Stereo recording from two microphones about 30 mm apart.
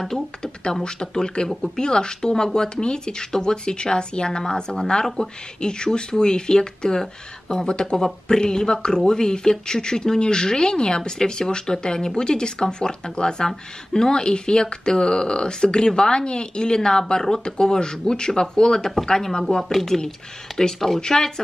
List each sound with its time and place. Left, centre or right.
1.2 s speech: left
5.0 s speech: centre
5.6 s speech: left
19.7 s speech: centre
21.0 s speech: left